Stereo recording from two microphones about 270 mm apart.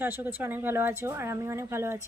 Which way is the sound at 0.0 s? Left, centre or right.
Centre.